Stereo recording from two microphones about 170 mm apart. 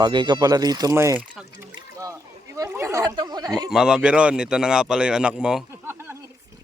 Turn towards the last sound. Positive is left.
turn(degrees=-10)  # may be behind; listen again after turning